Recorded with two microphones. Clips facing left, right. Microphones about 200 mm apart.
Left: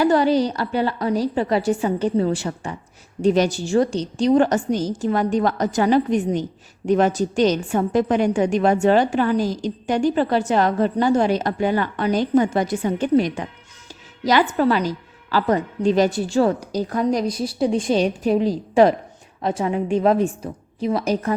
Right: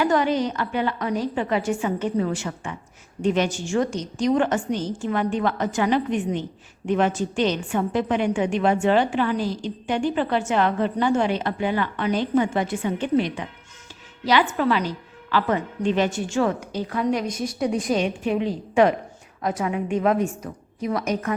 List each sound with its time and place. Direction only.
0.0 s a woman's voice: 35° left (ahead or behind)